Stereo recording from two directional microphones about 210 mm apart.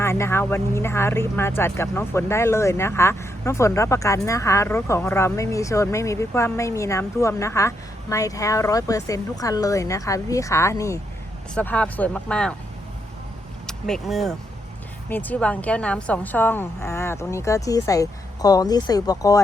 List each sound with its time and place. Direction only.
0.0 s speech: 10° left (ahead or behind)
13.7 s speech: 5° left (ahead or behind)